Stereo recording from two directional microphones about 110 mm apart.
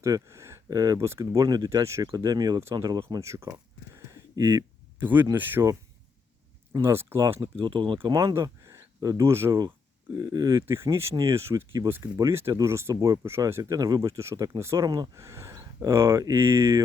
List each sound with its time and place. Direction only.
0.0 s speech: 25° right (ahead or behind)
3.1 s speech: 25° right (ahead or behind)
3.9 s a sound: 25° right (ahead or behind)
5.3 s speech: 20° right (ahead or behind)
6.8 s speech: 20° right (ahead or behind)
7.5 s speech: 45° right (ahead or behind)
8.4 s speech: 25° right (ahead or behind)
14.8 s speech: 35° right (ahead or behind)